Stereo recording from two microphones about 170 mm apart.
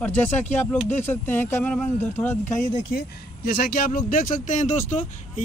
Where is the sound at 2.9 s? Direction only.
70° left (ahead or behind).